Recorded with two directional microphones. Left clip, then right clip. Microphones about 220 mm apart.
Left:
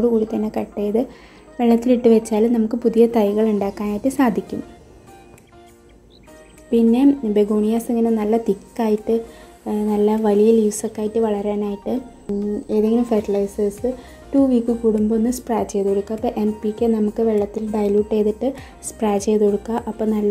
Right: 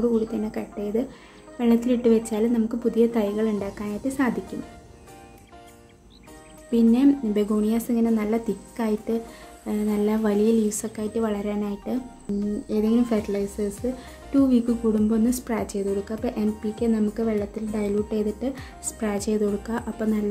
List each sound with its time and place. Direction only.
0.3 s a woman's voice: 15° left (ahead or behind)
6.7 s a woman's voice: 5° left (ahead or behind)